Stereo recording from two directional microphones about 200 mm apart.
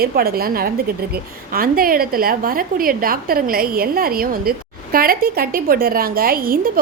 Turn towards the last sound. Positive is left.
turn(degrees=-45)  # may be behind; listen again after turning